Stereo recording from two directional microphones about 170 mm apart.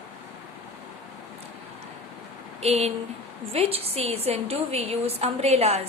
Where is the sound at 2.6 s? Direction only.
40° right (ahead or behind).